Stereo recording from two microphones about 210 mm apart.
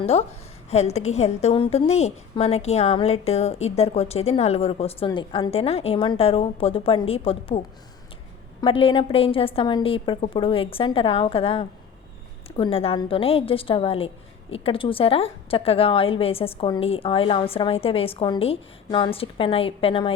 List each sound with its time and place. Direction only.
0.0 s a woman's voice: 30° left (ahead or behind)
8.6 s a woman's voice: 25° left (ahead or behind)